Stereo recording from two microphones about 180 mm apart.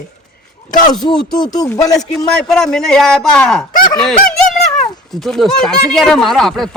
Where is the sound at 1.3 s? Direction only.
20° left (ahead or behind).